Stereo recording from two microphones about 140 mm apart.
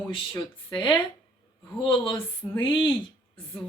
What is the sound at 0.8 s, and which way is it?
Speech, 35° left (ahead or behind).